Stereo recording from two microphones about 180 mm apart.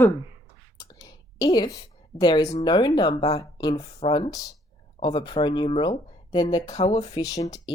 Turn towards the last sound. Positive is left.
turn(degrees=20)  # may be behind; listen again after turning